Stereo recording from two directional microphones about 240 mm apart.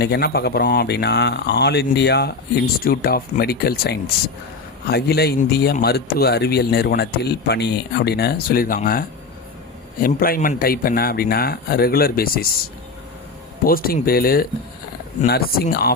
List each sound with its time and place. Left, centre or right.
0.0 s a man's voice: left
13.7 s a man's voice: left